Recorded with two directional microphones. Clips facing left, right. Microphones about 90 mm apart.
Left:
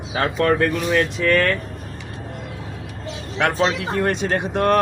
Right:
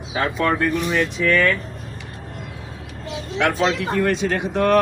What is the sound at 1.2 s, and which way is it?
Speech, 45° left (ahead or behind).